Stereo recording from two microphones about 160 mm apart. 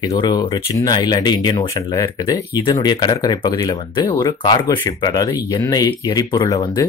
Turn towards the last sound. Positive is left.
turn(degrees=25)  # may be behind; listen again after turning